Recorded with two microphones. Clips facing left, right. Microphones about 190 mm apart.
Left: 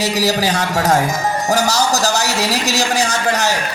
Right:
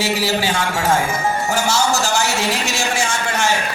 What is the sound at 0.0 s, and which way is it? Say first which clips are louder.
Speech: left 2 dB; 40° left (ahead or behind).